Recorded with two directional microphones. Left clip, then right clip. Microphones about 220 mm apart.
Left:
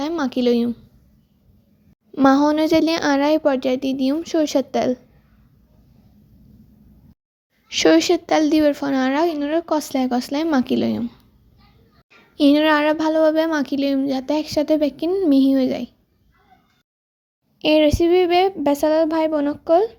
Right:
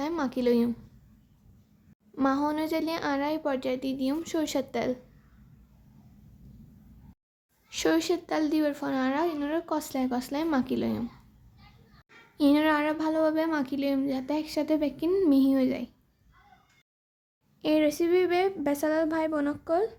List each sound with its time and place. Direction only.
0.0 s speech: 20° left (ahead or behind)
2.1 s a woman's voice: 30° left (ahead or behind)
7.7 s a woman's voice: 25° left (ahead or behind)
12.4 s a woman's voice: 25° left (ahead or behind)
17.6 s a woman's voice: 20° left (ahead or behind)